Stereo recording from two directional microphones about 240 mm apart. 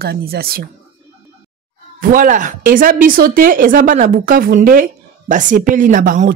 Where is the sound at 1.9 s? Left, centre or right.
Right.